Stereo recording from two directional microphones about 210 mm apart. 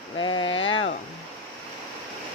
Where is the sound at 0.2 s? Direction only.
20° left (ahead or behind).